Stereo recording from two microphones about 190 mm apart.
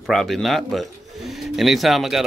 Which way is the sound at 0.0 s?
Centre (ahead or behind).